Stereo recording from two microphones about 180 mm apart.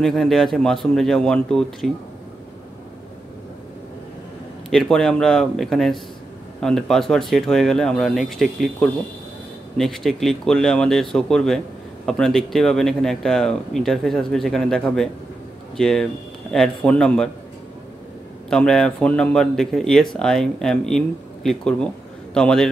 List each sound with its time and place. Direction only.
0.0 s speech: centre (ahead or behind)
4.6 s speech: centre (ahead or behind)
18.5 s speech: 5° left (ahead or behind)